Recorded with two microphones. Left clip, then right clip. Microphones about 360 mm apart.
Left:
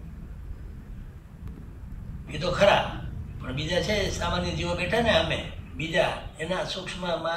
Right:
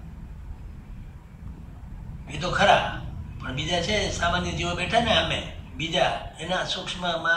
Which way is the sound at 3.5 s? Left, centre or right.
Centre.